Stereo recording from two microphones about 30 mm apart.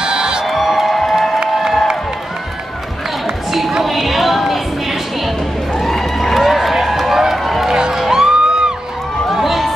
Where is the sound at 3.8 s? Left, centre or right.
Centre.